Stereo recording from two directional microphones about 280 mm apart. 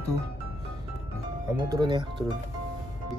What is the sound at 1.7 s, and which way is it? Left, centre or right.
Speech, centre.